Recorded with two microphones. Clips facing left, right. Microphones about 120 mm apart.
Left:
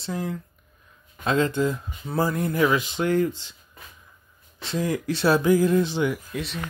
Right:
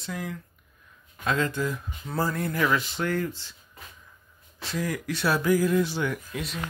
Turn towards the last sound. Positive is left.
turn(degrees=0)  # may be behind; listen again after turning